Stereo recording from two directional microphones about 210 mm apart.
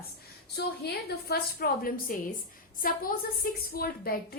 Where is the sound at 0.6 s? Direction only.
55° left (ahead or behind).